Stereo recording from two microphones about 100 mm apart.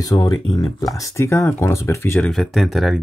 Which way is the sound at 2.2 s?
5° left (ahead or behind).